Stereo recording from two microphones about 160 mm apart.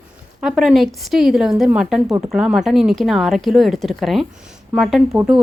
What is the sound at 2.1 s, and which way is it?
Speech, 20° right (ahead or behind).